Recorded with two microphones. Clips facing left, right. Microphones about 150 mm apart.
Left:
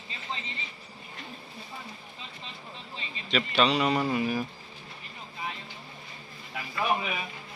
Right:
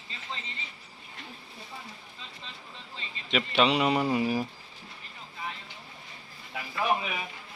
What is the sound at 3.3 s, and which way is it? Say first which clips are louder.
Speech: even; 15° right (ahead or behind).